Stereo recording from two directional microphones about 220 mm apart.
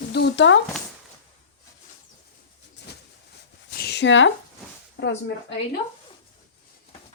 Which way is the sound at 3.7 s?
45° left (ahead or behind).